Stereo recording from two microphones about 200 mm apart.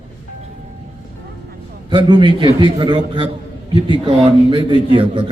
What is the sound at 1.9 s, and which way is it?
A man's voice, 25° right (ahead or behind).